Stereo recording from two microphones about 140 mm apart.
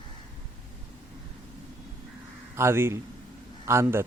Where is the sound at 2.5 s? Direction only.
20° right (ahead or behind).